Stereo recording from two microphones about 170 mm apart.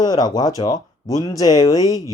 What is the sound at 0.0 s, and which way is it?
Speech, 20° left (ahead or behind).